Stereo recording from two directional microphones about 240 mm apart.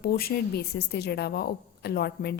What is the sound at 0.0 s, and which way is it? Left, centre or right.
A woman's voice, left.